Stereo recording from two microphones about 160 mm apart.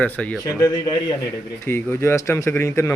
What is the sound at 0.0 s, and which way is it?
Speech, 10° left (ahead or behind).